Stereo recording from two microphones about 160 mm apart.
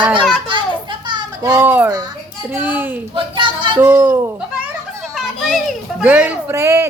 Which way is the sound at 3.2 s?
30° right (ahead or behind).